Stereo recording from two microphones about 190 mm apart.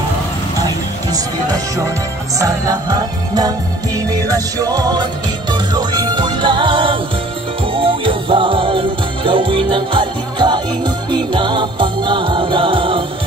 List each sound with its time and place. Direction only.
1.1 s music: 20° right (ahead or behind)